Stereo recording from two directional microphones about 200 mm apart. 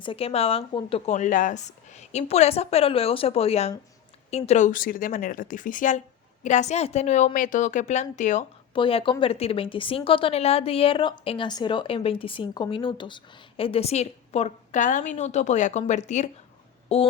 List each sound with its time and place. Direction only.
0.0 s a woman's voice: 25° left (ahead or behind)